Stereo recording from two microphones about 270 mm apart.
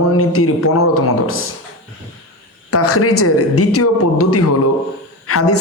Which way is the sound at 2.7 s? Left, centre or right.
Left.